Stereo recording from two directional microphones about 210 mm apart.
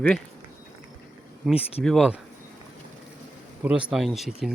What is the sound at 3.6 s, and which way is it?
Speech, 5° right (ahead or behind).